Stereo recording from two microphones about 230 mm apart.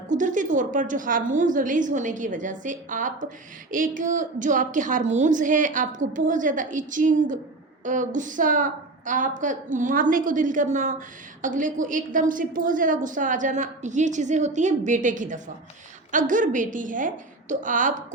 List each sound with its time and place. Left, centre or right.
0.1 s a woman's voice: right